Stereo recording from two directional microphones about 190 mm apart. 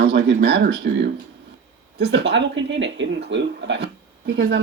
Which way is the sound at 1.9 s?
65° right (ahead or behind).